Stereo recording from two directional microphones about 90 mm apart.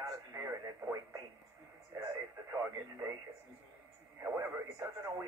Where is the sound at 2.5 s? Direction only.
35° right (ahead or behind).